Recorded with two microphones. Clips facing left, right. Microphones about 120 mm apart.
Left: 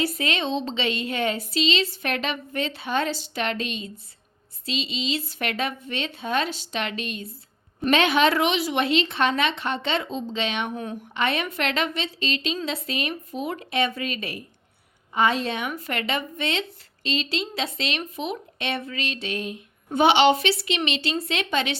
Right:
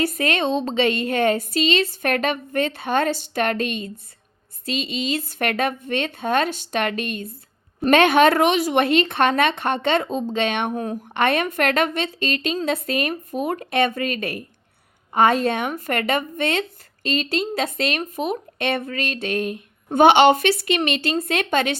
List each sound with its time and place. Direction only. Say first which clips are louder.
0.0 s speech: right 4 dB; 50° right (ahead or behind)